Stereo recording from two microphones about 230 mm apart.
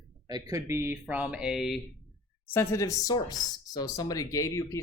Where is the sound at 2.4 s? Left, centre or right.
Centre.